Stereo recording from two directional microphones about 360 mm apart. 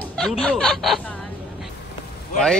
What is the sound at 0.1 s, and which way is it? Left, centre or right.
Speech, centre.